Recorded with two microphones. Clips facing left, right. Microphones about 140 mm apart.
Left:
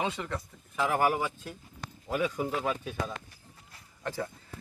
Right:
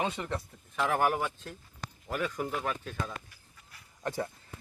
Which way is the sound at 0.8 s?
5° left (ahead or behind).